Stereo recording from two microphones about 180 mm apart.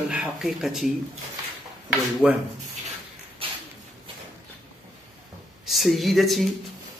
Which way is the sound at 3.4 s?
30° right (ahead or behind).